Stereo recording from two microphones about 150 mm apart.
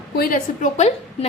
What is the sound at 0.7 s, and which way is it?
Speech, 45° left (ahead or behind).